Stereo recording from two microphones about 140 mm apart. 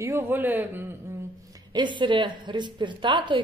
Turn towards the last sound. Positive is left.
turn(degrees=-35)  # may be behind; listen again after turning